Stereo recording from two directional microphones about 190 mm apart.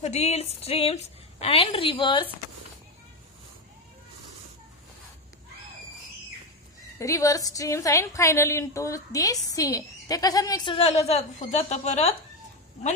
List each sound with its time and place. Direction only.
0.0 s a woman's voice: 35° left (ahead or behind)
7.0 s a woman's voice: 15° left (ahead or behind); by 12.1 s 35° left (ahead or behind)